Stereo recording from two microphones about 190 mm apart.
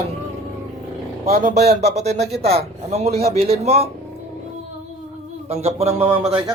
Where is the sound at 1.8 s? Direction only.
35° right (ahead or behind).